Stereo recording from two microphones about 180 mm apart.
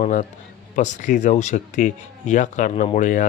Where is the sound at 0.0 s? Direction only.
40° left (ahead or behind).